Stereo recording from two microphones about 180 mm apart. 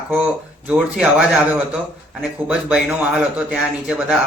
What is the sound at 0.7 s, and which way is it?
Speech, 5° right (ahead or behind).